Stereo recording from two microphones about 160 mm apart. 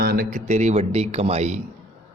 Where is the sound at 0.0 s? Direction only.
65° right (ahead or behind); by 1.6 s 45° right (ahead or behind).